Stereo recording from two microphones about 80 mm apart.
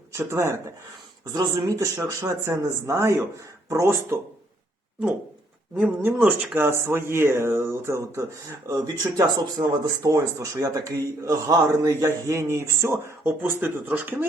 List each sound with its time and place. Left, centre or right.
0.1 s speech: right
1.2 s speech: right
6.1 s speech: centre
6.7 s speech: right
10.1 s speech: right